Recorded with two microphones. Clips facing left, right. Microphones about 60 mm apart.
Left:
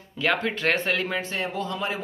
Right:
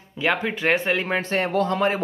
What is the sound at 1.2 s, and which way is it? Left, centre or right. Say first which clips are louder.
Speech: right 7 dB; right.